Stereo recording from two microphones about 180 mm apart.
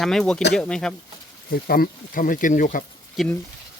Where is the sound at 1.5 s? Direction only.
55° left (ahead or behind).